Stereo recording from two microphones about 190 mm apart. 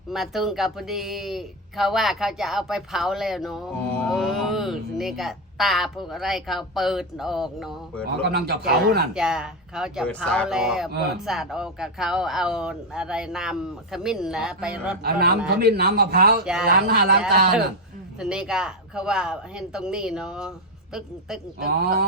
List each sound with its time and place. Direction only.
0.1 s speech: centre (ahead or behind)
8.2 s a man's voice: 55° right (ahead or behind)
9.1 s speech: 5° right (ahead or behind)
15.0 s a man's voice: 55° right (ahead or behind)
16.4 s speech: 5° right (ahead or behind)
16.6 s a man's voice: 55° right (ahead or behind)
18.2 s speech: 5° right (ahead or behind)
21.8 s a man's voice: 55° right (ahead or behind)